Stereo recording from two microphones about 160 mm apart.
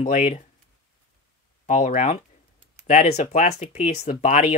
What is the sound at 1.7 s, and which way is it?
Speech, 50° left (ahead or behind).